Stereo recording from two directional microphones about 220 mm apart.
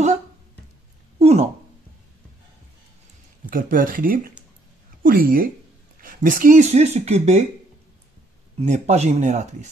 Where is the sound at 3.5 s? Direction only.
40° right (ahead or behind).